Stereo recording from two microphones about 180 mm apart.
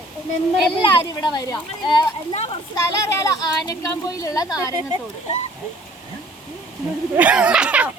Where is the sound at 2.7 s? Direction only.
20° left (ahead or behind).